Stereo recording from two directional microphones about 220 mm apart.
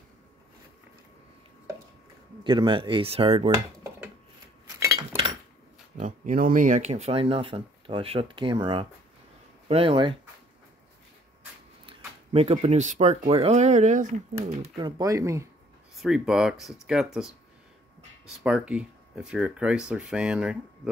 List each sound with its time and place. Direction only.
2.4 s speech: 20° right (ahead or behind)
4.7 s cutlery: 15° right (ahead or behind)
5.9 s speech: 35° right (ahead or behind)
11.8 s speech: 25° right (ahead or behind)
14.6 s speech: 20° right (ahead or behind)
16.0 s speech: centre (ahead or behind)